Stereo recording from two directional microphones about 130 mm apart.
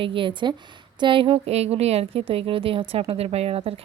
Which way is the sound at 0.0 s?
40° right (ahead or behind).